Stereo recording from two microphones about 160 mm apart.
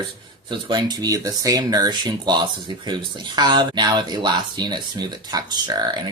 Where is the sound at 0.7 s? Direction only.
25° right (ahead or behind).